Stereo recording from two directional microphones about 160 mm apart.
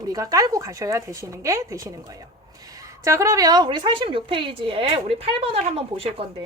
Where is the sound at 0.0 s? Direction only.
20° right (ahead or behind).